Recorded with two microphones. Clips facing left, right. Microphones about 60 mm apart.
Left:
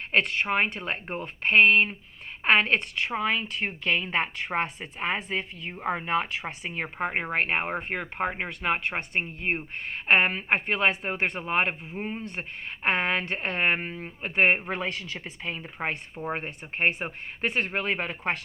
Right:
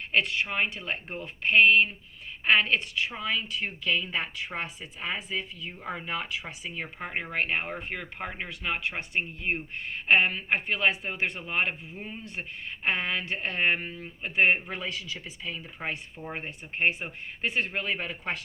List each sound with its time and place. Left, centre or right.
0.1 s a woman's voice: left